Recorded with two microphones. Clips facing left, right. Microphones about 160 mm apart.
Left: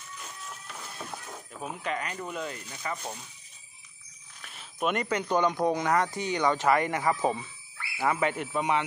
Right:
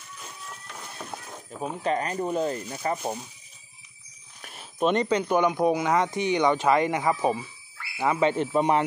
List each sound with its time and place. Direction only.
0.2 s a sound: centre (ahead or behind)
1.1 s speech: 25° right (ahead or behind)
4.4 s a sound: 45° right (ahead or behind)
4.7 s speech: 30° right (ahead or behind)
5.0 s speech: 15° right (ahead or behind)
8.3 s speech: 30° right (ahead or behind)